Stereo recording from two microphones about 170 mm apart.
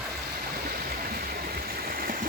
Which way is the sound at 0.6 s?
65° right (ahead or behind).